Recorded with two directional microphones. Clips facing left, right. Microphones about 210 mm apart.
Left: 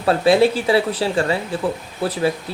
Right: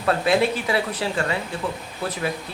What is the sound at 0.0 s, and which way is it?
Speech, 30° left (ahead or behind).